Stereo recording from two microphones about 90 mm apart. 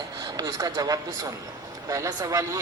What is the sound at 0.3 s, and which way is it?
A man's voice, 45° right (ahead or behind).